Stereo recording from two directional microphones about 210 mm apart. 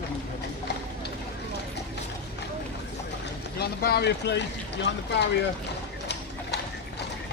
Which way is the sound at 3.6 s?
50° left (ahead or behind).